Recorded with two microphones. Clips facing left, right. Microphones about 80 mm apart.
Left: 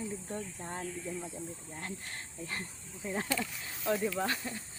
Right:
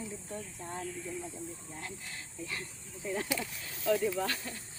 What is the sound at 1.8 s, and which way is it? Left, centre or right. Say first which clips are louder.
Speech: left 4 dB; left.